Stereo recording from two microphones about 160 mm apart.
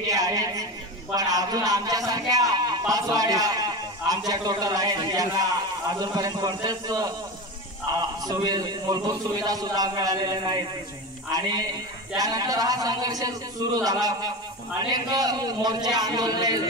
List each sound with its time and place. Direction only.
0.0 s a sound: 20° right (ahead or behind)
1.1 s a man's voice: 25° right (ahead or behind)
8.3 s a man's voice: 25° right (ahead or behind)